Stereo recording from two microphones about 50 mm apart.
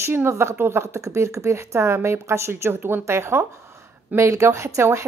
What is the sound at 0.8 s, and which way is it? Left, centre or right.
Speech, right.